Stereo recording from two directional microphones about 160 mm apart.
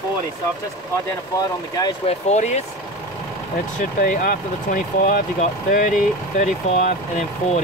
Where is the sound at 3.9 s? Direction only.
60° left (ahead or behind).